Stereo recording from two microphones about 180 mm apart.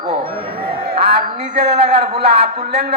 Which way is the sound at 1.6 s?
35° right (ahead or behind).